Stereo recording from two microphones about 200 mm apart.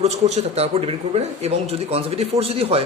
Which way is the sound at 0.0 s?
30° right (ahead or behind).